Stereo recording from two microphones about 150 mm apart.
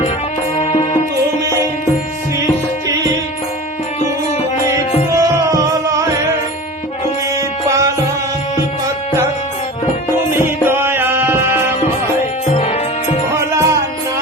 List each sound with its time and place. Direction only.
0.6 s music: 45° left (ahead or behind)
5.1 s music: 20° right (ahead or behind)
7.7 s tabla: 20° right (ahead or behind)
10.3 s music: 15° right (ahead or behind)
12.5 s music: 45° left (ahead or behind)
13.3 s music: 20° right (ahead or behind)